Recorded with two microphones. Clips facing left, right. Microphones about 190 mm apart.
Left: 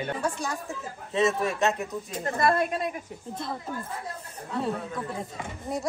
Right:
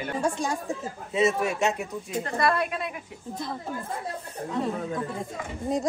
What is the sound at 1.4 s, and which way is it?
Speech, 15° right (ahead or behind).